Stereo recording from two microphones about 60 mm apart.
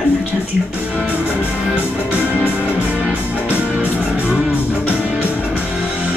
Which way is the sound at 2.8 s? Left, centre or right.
Right.